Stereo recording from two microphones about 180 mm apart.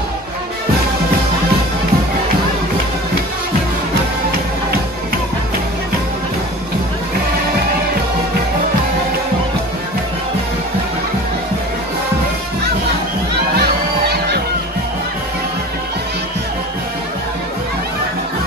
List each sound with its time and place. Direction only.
13.6 s music: 65° right (ahead or behind)